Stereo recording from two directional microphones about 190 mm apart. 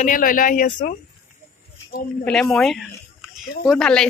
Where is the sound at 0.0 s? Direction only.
45° left (ahead or behind).